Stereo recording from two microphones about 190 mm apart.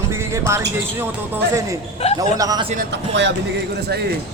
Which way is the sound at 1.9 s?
35° left (ahead or behind).